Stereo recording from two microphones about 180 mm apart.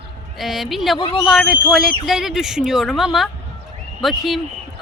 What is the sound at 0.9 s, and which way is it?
Speech, 30° left (ahead or behind).